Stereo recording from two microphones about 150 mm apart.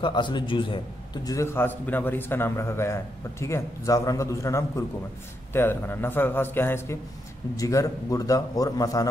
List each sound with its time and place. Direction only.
0.0 s a man's voice: 30° left (ahead or behind)